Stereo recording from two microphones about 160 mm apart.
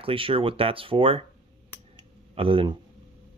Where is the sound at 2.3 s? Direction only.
35° right (ahead or behind).